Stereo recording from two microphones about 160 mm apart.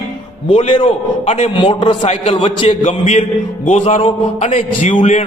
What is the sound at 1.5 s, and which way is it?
A man's voice, 30° left (ahead or behind).